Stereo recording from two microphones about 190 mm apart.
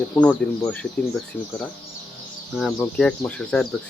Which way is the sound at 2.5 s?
5° left (ahead or behind).